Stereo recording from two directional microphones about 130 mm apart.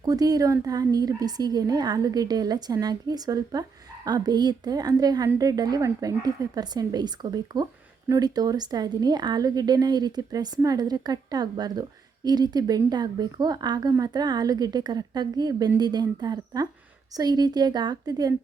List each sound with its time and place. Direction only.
0.0 s a woman's voice: 30° right (ahead or behind)